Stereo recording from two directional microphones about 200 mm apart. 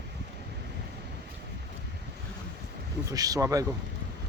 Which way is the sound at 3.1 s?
15° right (ahead or behind).